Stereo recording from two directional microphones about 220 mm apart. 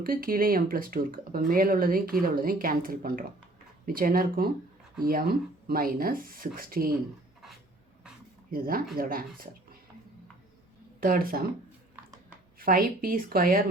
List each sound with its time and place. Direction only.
0.0 s speech: 40° right (ahead or behind)
8.4 s speech: 40° right (ahead or behind)
11.0 s speech: 40° right (ahead or behind)
12.5 s speech: 40° right (ahead or behind)